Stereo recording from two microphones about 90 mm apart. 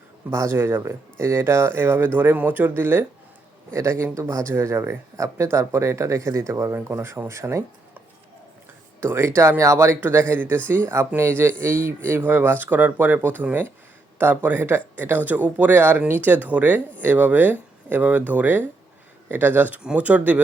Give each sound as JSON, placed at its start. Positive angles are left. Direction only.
{"t": 0.3, "sound": "speech", "side_deg": -30}
{"t": 9.0, "sound": "speech", "side_deg": -25}